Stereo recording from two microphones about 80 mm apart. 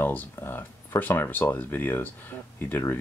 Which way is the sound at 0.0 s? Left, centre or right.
Left.